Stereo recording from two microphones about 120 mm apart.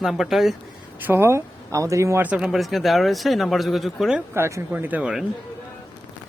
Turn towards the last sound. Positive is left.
turn(degrees=-5)  # may be behind; listen again after turning